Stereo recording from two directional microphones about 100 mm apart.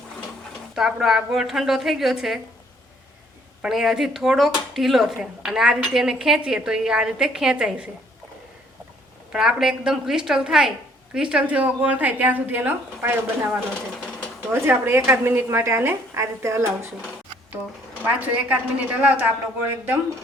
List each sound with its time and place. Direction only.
0.8 s speech: 5° right (ahead or behind)
3.6 s speech: 5° right (ahead or behind)
9.3 s a woman's voice: 5° right (ahead or behind); by 16.9 s 25° right (ahead or behind)
18.0 s a woman's voice: 15° right (ahead or behind)